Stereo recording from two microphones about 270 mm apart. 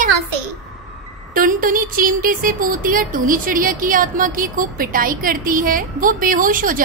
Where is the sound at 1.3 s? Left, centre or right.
Right.